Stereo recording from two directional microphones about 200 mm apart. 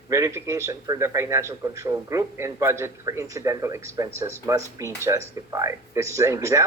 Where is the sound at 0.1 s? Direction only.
15° right (ahead or behind).